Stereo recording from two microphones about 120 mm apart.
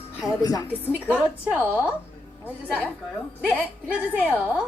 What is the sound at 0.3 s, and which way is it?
Speech, 30° left (ahead or behind).